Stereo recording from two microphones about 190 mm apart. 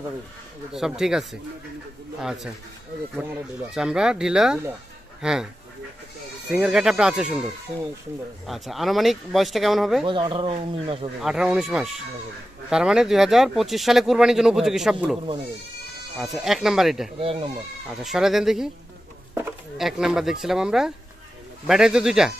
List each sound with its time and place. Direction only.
0.7 s speech: centre (ahead or behind)
3.7 s speech: 5° right (ahead or behind)
6.5 s speech: 5° right (ahead or behind)
8.5 s speech: centre (ahead or behind)
10.0 s speech: 25° right (ahead or behind)
11.1 s speech: 5° right (ahead or behind)
16.2 s speech: centre (ahead or behind)
17.2 s speech: 30° right (ahead or behind)
17.8 s speech: centre (ahead or behind)
19.8 s speech: 5° right (ahead or behind)